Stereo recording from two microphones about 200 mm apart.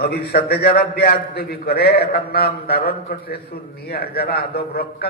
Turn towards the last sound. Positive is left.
turn(degrees=50)  # may be behind; listen again after turning